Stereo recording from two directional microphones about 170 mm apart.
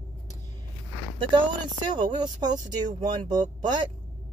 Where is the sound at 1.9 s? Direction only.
25° right (ahead or behind).